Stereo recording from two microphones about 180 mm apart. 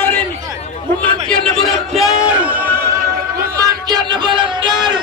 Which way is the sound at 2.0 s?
5° right (ahead or behind).